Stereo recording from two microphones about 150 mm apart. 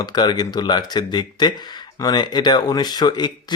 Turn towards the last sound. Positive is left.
turn(degrees=30)  # may be behind; listen again after turning